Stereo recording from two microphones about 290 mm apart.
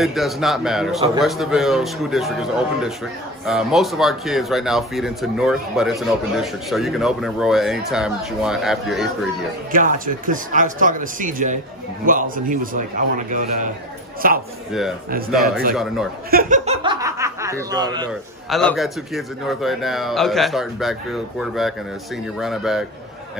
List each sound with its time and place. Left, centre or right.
0.0 s speech: centre
3.4 s speech: centre
9.7 s speech: right
14.7 s speech: centre
16.3 s speech: right
18.5 s speech: centre